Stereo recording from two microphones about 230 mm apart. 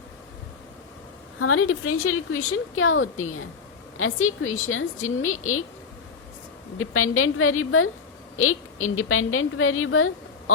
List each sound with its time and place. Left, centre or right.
1.4 s a woman's voice: left
6.7 s a woman's voice: left